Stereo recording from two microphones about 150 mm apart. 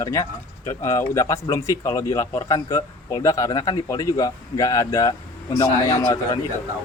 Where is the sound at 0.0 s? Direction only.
20° left (ahead or behind).